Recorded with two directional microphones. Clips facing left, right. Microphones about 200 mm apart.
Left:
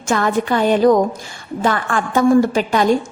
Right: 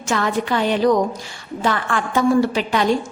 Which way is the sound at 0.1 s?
50° left (ahead or behind).